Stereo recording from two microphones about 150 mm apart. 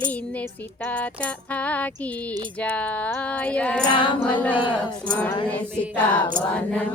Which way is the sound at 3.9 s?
30° left (ahead or behind).